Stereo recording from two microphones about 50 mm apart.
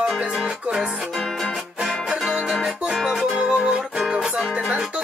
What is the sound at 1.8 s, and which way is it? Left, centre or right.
Music, centre.